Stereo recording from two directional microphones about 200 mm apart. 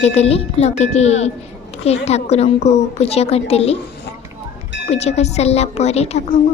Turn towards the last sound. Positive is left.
turn(degrees=30)  # may be behind; listen again after turning